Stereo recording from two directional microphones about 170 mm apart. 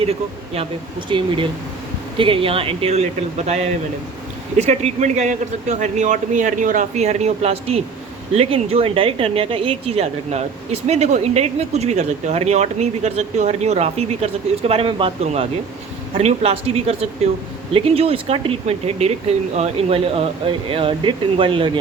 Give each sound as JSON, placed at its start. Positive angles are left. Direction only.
{"t": 0.1, "sound": "a woman's voice", "side_deg": -35}